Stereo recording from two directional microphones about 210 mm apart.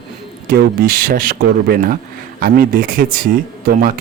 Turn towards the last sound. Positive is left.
turn(degrees=-40)  # may be behind; listen again after turning